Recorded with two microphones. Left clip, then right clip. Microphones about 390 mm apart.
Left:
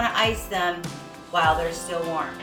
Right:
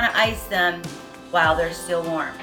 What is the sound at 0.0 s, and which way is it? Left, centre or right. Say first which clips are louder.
Speech: right 3 dB; centre.